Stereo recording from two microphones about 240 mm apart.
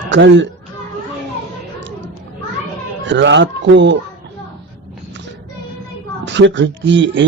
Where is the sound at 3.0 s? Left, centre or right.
Right.